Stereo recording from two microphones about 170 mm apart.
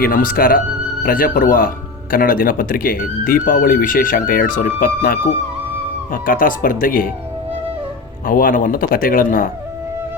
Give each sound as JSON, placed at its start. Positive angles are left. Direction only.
{"t": 0.0, "sound": "speech", "side_deg": 55}
{"t": 8.3, "sound": "speech", "side_deg": 55}